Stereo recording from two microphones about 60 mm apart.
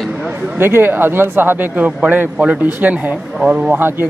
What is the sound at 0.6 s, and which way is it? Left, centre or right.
Speech, right.